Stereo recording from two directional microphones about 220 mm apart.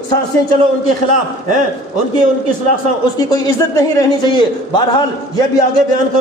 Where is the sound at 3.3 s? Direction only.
15° left (ahead or behind).